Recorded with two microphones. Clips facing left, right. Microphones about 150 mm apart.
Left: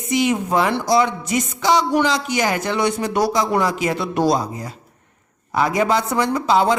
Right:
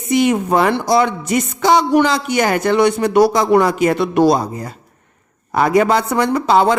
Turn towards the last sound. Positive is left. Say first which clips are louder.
# right 4 dB
turn(degrees=-60)  # may be behind; listen again after turning